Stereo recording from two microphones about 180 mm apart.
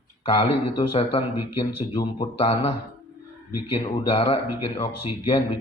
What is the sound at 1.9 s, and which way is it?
A man's voice, 30° left (ahead or behind).